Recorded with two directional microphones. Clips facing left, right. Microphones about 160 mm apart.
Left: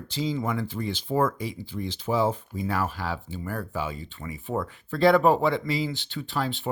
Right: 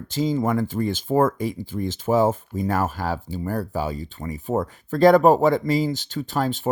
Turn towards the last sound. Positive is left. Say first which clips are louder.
# right 5 dB
turn(degrees=-45)  # may be behind; listen again after turning